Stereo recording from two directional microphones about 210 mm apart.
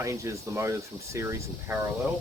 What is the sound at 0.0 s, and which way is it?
Speech, 15° right (ahead or behind).